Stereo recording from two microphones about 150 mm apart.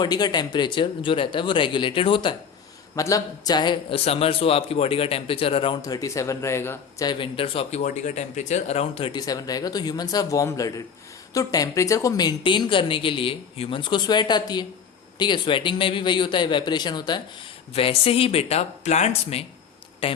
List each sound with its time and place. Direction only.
0.0 s a man's voice: 30° left (ahead or behind)
2.9 s a man's voice: 20° left (ahead or behind)
7.1 s a man's voice: 35° left (ahead or behind)
7.8 s speech: 55° left (ahead or behind)
9.1 s a woman's voice: 25° left (ahead or behind)